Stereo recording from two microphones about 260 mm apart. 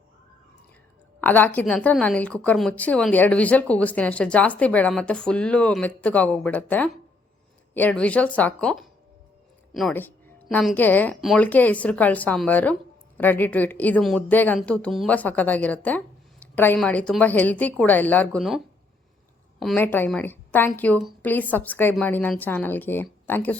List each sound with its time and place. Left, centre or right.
1.2 s a woman's voice: centre